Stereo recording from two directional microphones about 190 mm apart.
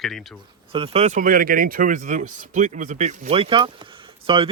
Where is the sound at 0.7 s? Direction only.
30° right (ahead or behind).